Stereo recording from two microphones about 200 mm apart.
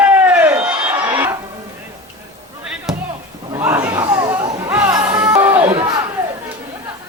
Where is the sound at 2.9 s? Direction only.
Centre (ahead or behind).